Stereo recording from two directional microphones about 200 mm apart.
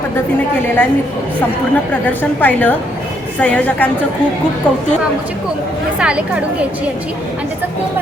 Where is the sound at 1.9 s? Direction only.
10° left (ahead or behind).